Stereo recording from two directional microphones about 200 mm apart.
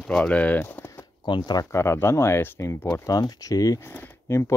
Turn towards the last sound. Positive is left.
turn(degrees=15)  # may be behind; listen again after turning